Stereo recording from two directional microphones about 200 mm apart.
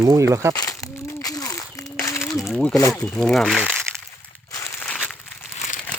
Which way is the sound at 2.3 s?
Centre (ahead or behind).